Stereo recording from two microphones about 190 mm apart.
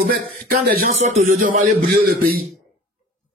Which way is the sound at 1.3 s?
50° right (ahead or behind).